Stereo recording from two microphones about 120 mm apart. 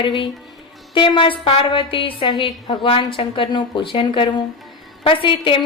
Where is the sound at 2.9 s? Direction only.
50° left (ahead or behind).